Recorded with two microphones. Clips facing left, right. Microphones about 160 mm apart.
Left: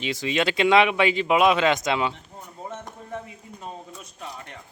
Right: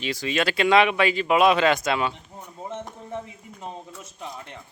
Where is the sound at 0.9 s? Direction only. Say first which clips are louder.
Even; 20° left (ahead or behind).